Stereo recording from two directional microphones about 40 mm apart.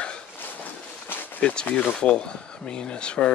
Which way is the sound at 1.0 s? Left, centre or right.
Left.